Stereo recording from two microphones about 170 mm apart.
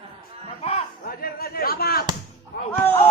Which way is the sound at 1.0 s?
60° left (ahead or behind).